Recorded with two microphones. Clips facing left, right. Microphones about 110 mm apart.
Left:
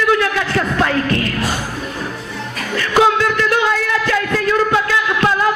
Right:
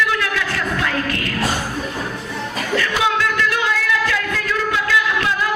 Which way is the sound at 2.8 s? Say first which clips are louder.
Left 7 dB; 40° left (ahead or behind).